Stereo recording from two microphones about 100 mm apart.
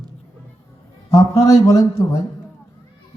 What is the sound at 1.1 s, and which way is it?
Speech, 30° left (ahead or behind).